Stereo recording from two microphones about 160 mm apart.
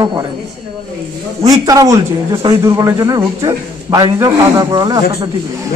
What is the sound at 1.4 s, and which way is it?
A man's voice, 25° right (ahead or behind).